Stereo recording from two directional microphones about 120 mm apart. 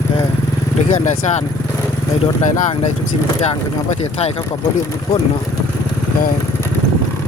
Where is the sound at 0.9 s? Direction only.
75° left (ahead or behind).